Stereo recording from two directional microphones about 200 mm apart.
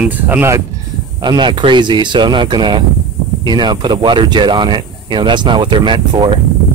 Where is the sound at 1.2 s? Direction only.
20° right (ahead or behind).